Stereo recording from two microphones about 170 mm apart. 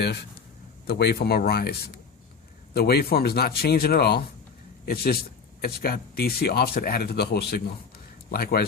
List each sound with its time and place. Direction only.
0.0 s speech: 75° left (ahead or behind)